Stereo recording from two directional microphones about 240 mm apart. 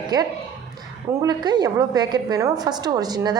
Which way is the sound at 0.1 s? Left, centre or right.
Centre.